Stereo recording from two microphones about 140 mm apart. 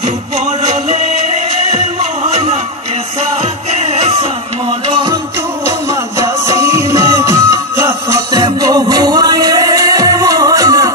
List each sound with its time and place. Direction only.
0.5 s music: 50° right (ahead or behind)
3.8 s a sound: 45° right (ahead or behind)
6.1 s music: 20° right (ahead or behind)